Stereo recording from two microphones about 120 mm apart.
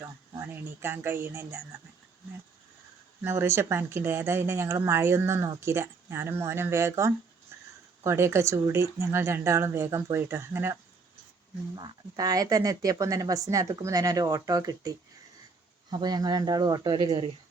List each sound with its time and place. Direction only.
0.0 s speech: 20° right (ahead or behind)
3.2 s speech: 20° right (ahead or behind)
7.5 s a sound: 20° right (ahead or behind)
8.0 s speech: 20° right (ahead or behind)
11.8 s speech: 30° right (ahead or behind)